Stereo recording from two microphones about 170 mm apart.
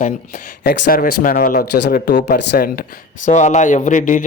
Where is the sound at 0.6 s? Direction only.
60° left (ahead or behind); by 2.6 s 80° left.